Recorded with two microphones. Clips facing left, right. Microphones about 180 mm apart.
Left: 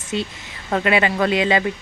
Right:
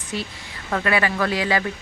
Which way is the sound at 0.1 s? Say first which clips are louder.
Left 5 dB; 20° left (ahead or behind).